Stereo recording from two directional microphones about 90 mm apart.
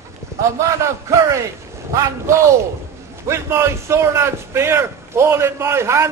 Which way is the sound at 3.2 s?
30° right (ahead or behind).